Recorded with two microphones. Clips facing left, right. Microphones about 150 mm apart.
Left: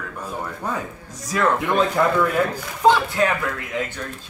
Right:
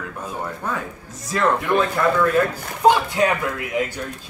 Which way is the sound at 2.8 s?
15° right (ahead or behind).